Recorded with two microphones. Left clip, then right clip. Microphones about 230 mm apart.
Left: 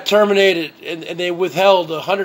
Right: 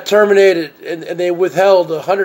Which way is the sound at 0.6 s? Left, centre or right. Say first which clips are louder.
Right 3 dB; left.